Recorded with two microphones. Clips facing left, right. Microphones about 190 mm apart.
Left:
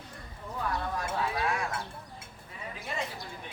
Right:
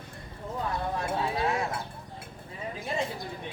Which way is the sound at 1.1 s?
25° right (ahead or behind).